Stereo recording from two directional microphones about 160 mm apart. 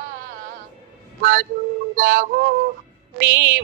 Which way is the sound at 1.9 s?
60° right (ahead or behind).